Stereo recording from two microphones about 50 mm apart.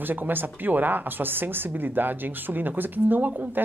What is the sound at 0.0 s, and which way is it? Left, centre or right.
A woman's voice, right.